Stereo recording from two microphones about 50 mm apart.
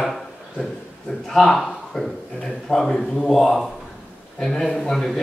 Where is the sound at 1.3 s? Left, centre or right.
Centre.